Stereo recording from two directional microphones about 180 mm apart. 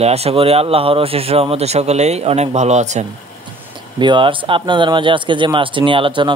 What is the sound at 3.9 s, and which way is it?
Speech, 25° right (ahead or behind).